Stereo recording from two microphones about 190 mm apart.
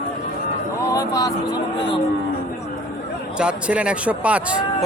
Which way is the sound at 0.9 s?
20° left (ahead or behind).